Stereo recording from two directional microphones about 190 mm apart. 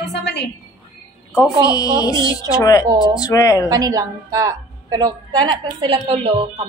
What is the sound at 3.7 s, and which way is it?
A woman's voice, 20° right (ahead or behind).